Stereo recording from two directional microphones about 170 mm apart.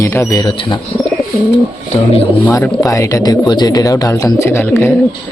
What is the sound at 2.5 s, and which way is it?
Speech, 15° left (ahead or behind).